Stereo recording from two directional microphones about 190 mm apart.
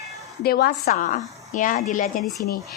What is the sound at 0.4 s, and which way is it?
Speech, 55° left (ahead or behind).